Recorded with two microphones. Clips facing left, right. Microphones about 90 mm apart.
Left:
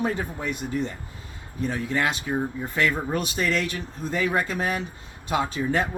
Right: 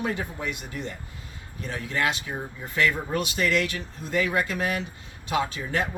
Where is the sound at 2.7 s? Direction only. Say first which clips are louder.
Right 1 dB; 35° left (ahead or behind).